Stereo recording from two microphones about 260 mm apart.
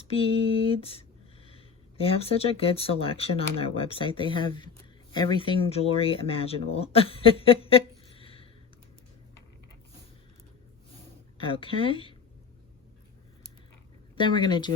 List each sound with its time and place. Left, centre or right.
0.1 s speech: left
11.3 s speech: centre
14.2 s speech: centre